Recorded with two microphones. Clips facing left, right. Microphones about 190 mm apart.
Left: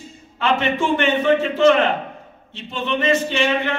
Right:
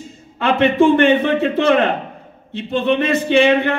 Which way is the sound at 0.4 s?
60° right (ahead or behind).